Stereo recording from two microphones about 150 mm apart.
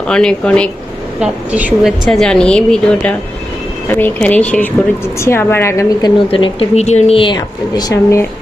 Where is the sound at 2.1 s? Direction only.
5° left (ahead or behind).